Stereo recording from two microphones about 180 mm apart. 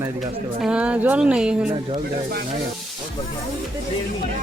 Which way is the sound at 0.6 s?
5° right (ahead or behind).